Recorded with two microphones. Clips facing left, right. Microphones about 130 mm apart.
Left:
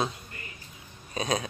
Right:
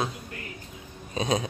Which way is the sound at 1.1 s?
25° right (ahead or behind).